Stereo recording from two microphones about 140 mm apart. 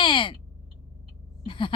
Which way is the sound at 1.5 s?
40° left (ahead or behind).